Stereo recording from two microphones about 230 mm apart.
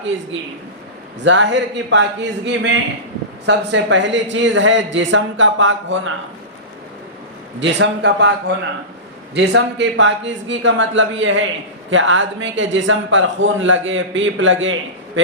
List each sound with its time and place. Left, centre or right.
1.2 s speech: right
7.6 s a man's voice: right